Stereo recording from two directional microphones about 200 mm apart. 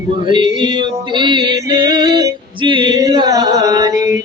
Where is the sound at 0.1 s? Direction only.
25° right (ahead or behind).